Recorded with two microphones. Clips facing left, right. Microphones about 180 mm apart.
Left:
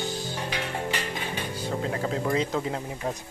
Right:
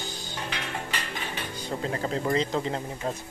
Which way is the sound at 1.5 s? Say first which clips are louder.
Left 1 dB; 5° left (ahead or behind).